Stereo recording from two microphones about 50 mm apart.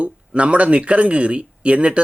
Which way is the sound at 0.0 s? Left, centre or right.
Right.